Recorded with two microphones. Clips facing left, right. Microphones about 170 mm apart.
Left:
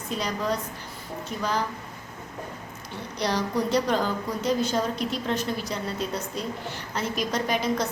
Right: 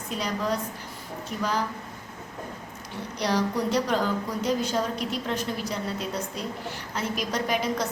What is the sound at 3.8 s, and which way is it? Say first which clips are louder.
A woman's voice: even; 5° right (ahead or behind).